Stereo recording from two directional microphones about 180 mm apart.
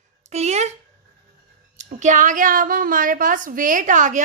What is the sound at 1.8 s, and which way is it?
A woman's voice, 40° right (ahead or behind).